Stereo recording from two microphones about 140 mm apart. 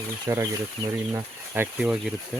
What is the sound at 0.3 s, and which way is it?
Speech, 20° right (ahead or behind).